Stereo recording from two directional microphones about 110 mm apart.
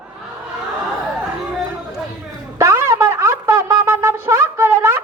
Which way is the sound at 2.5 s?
25° right (ahead or behind).